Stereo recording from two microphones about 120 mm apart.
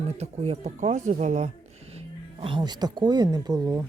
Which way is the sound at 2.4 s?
40° right (ahead or behind).